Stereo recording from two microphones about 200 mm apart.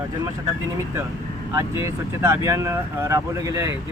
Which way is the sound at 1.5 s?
15° right (ahead or behind).